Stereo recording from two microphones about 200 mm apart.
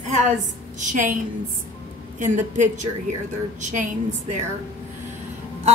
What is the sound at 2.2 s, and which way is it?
A woman's voice, 40° right (ahead or behind).